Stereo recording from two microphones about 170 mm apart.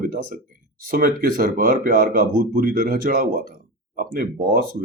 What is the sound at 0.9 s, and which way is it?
Speech, 55° right (ahead or behind).